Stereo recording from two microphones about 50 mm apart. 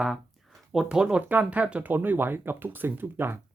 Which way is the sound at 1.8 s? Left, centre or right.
Right.